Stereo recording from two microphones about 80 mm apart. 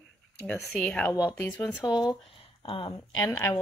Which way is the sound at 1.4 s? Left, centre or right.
Left.